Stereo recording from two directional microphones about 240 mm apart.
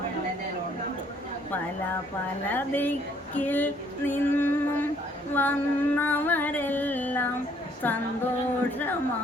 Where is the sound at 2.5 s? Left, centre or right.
Centre.